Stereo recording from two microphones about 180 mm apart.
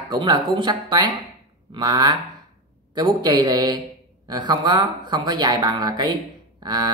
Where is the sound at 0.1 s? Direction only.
25° right (ahead or behind).